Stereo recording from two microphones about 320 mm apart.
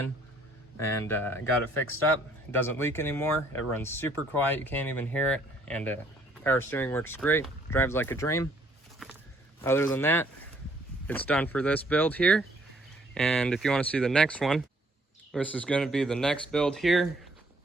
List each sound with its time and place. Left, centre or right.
0.8 s speech: centre
2.5 s speech: centre
9.0 s a sound: centre
9.6 s speech: centre